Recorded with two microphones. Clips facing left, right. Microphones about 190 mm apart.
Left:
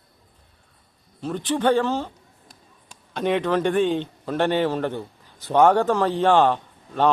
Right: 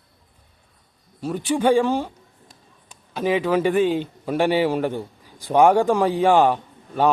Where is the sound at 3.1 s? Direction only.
5° right (ahead or behind).